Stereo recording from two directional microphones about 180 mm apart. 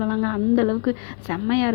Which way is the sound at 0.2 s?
25° left (ahead or behind).